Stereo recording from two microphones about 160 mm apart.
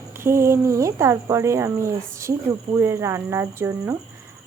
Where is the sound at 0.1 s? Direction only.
15° right (ahead or behind).